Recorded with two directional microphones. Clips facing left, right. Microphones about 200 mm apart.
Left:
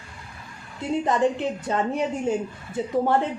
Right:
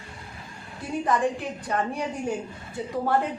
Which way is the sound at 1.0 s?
25° left (ahead or behind).